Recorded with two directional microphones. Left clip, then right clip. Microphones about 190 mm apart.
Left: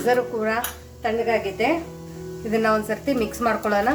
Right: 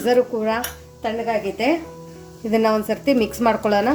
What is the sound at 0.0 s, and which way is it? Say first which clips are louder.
Speech: right 3 dB; 40° right (ahead or behind).